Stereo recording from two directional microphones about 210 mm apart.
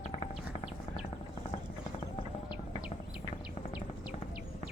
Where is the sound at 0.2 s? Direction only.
25° left (ahead or behind).